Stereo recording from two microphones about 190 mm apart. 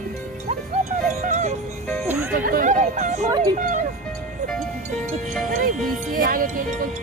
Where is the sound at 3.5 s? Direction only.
40° right (ahead or behind).